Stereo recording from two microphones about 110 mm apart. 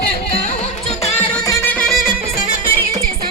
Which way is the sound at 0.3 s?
75° left (ahead or behind).